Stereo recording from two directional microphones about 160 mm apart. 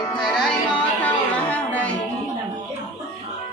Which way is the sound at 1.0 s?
10° left (ahead or behind).